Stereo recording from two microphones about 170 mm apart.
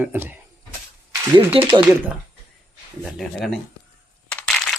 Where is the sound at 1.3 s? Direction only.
30° right (ahead or behind).